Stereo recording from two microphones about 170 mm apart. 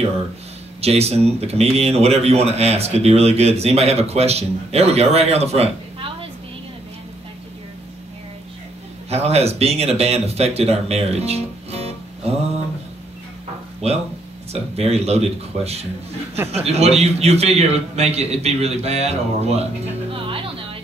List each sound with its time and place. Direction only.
0.7 s speech: 35° right (ahead or behind)
9.1 s speech: 40° right (ahead or behind)
14.5 s speech: 40° right (ahead or behind)
20.1 s music: 30° right (ahead or behind)